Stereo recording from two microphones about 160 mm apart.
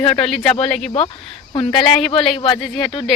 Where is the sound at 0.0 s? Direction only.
35° left (ahead or behind).